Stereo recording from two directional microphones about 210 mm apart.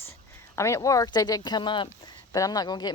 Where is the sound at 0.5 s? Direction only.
15° left (ahead or behind).